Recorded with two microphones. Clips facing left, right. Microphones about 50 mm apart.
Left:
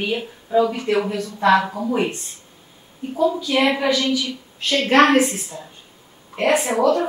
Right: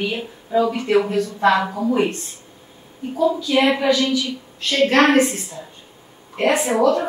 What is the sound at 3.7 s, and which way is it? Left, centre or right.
A woman's voice, centre.